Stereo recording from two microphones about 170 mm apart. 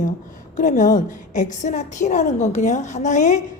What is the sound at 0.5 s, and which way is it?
A woman's voice, 50° left (ahead or behind).